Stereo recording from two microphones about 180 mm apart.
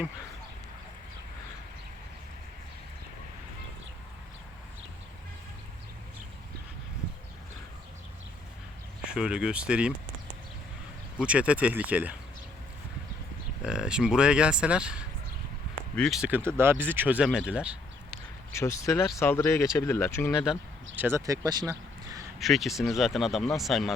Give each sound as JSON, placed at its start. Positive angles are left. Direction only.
{"t": 9.0, "sound": "speech", "side_deg": -5}
{"t": 11.2, "sound": "speech", "side_deg": -5}
{"t": 13.7, "sound": "speech", "side_deg": -5}
{"t": 18.5, "sound": "speech", "side_deg": 15}
{"t": 20.4, "sound": "speech", "side_deg": -5}
{"t": 22.4, "sound": "speech", "side_deg": 0}